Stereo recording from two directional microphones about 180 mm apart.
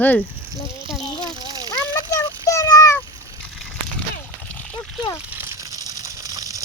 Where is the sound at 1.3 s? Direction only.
20° right (ahead or behind).